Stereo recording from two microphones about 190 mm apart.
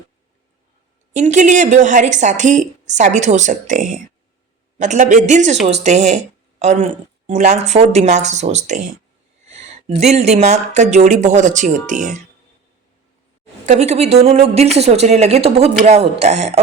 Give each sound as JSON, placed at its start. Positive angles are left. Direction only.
{"t": 1.1, "sound": "speech", "side_deg": -40}
{"t": 13.7, "sound": "speech", "side_deg": -35}